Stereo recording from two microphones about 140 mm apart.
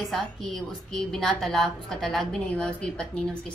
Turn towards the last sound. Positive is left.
turn(degrees=5)  # may be behind; listen again after turning